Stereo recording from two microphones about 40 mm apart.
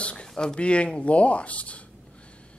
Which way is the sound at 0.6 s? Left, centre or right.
Left.